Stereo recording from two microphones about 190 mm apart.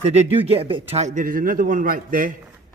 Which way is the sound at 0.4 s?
30° right (ahead or behind).